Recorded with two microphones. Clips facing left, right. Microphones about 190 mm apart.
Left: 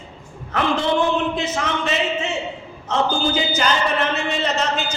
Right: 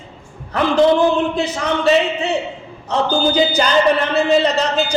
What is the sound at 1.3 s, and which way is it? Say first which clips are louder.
A man's voice: right 4 dB; 35° right (ahead or behind).